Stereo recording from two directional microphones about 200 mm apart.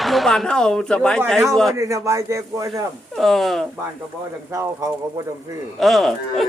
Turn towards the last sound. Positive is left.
turn(degrees=0)  # may be behind; listen again after turning